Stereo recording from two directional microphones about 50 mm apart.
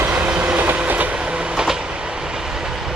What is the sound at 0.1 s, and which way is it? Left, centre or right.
Train, right.